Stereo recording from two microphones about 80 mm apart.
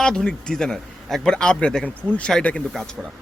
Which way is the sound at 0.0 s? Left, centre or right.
Centre.